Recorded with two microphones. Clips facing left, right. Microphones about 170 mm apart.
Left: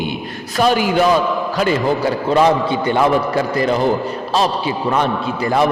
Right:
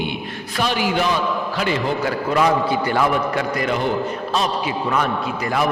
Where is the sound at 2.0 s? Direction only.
30° left (ahead or behind).